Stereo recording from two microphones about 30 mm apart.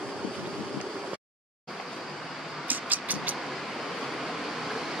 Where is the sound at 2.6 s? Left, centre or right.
Right.